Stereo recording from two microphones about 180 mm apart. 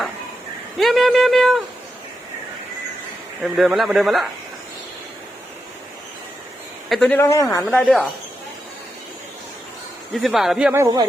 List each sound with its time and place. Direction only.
0.8 s speech: centre (ahead or behind)
3.4 s speech: centre (ahead or behind)
6.8 s a man's voice: centre (ahead or behind)
7.2 s speech: 15° left (ahead or behind)
7.7 s speech: centre (ahead or behind)
10.2 s speech: centre (ahead or behind)
10.7 s speech: 15° right (ahead or behind)